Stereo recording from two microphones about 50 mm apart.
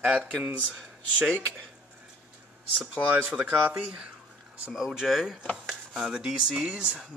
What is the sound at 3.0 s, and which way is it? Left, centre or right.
Speech, right.